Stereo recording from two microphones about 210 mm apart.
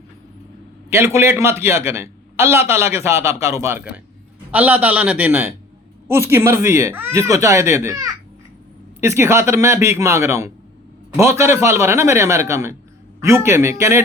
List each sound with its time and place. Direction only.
0.9 s a man's voice: 15° right (ahead or behind)